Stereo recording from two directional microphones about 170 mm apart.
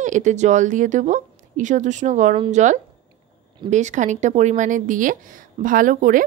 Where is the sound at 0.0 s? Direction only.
45° right (ahead or behind).